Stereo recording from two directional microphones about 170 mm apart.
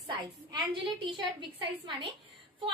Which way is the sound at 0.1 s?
30° right (ahead or behind).